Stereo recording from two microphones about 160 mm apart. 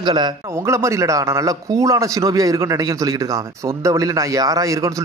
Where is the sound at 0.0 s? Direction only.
25° right (ahead or behind).